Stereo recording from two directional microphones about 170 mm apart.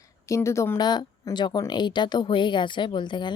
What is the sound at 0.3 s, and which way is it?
Speech, 15° left (ahead or behind).